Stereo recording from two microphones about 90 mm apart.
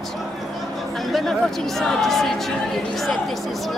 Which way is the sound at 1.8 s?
5° left (ahead or behind).